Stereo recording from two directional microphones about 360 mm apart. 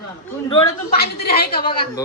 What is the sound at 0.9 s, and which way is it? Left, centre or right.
Speech, left.